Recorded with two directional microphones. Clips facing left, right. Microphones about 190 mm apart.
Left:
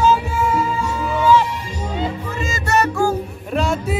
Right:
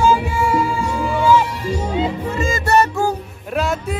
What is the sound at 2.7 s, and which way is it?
Music, 25° right (ahead or behind).